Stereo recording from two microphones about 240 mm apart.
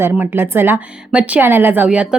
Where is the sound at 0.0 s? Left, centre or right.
Centre.